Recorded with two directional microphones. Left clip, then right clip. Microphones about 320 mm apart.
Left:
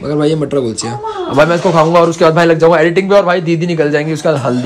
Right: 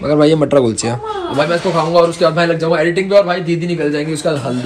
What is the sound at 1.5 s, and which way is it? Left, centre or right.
A man's voice, left.